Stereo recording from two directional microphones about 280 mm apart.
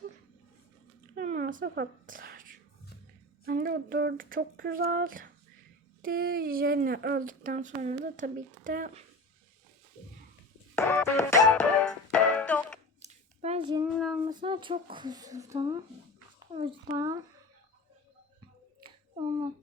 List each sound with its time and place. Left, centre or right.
1.1 s a sound: right
3.4 s speech: right
10.8 s music: centre
13.0 s a sound: right
14.0 s child singing: centre
14.3 s speech: centre
16.6 s speech: right
17.0 s speech: centre
18.8 s a sound: centre